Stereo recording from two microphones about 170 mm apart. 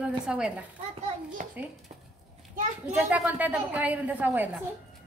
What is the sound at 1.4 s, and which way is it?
Speech, 50° right (ahead or behind).